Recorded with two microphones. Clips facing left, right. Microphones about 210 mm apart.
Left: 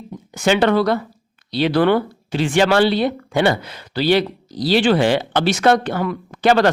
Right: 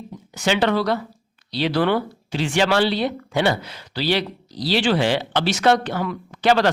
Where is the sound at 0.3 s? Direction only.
50° left (ahead or behind).